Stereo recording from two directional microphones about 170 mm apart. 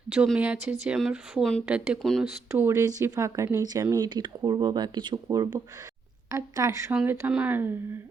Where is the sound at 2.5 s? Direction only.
15° right (ahead or behind).